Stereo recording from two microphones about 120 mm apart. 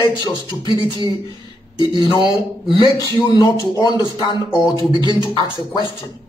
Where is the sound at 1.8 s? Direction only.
40° left (ahead or behind).